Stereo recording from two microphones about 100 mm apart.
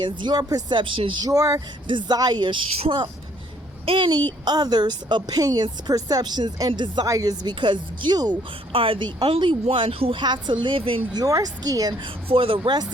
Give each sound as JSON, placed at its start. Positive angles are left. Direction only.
{"t": 0.0, "sound": "a woman's voice", "side_deg": -50}
{"t": 1.2, "sound": "speech", "side_deg": -35}
{"t": 1.9, "sound": "a woman's voice", "side_deg": -55}
{"t": 3.8, "sound": "speech", "side_deg": -60}
{"t": 4.4, "sound": "a woman's voice", "side_deg": -45}
{"t": 7.1, "sound": "speech", "side_deg": -40}
{"t": 8.7, "sound": "speech", "side_deg": -60}
{"t": 9.3, "sound": "speech", "side_deg": -65}
{"t": 11.1, "sound": "speech", "side_deg": -35}
{"t": 12.3, "sound": "speech", "side_deg": -65}